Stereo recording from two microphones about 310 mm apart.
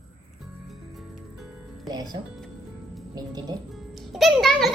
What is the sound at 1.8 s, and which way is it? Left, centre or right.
Speech, centre.